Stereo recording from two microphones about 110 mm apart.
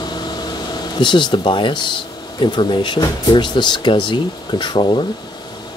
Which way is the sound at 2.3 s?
45° left (ahead or behind).